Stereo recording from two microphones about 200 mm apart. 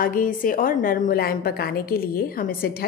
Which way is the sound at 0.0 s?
45° left (ahead or behind).